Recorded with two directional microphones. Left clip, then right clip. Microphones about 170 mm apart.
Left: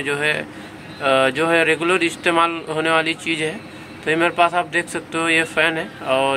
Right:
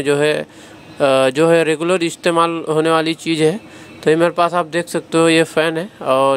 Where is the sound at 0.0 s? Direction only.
80° right.